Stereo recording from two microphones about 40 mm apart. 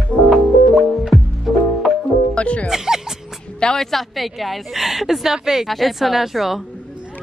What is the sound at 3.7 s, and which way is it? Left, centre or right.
Speech, centre.